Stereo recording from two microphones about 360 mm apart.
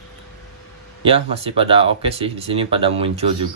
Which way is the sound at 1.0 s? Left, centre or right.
Centre.